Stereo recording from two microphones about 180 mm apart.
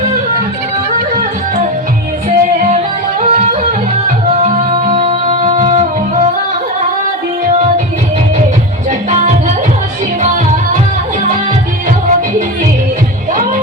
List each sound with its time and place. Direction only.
2.6 s music: 45° right (ahead or behind)
4.9 s music: 30° right (ahead or behind)
5.5 s music: 45° right (ahead or behind)
8.9 s music: 40° right (ahead or behind)